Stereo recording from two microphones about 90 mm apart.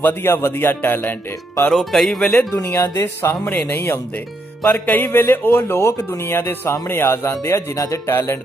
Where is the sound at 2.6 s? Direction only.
20° left (ahead or behind).